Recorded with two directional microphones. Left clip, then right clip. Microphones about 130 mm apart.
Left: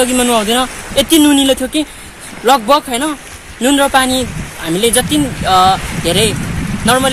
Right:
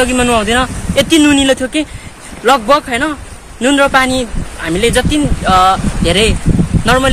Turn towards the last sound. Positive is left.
turn(degrees=5)  # may be behind; listen again after turning